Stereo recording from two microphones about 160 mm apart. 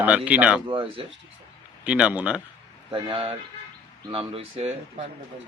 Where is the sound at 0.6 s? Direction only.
35° right (ahead or behind).